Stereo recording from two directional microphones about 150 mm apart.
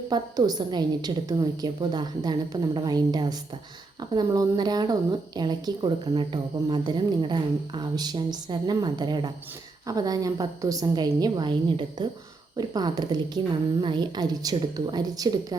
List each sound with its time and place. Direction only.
0.1 s speech: 25° right (ahead or behind)